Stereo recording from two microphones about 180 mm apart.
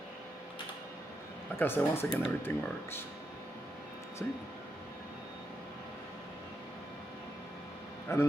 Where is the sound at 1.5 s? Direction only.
10° left (ahead or behind).